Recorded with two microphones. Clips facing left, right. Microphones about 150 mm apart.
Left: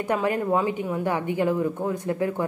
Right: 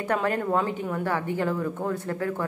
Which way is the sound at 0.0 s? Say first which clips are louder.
Left 2 dB; 10° left (ahead or behind).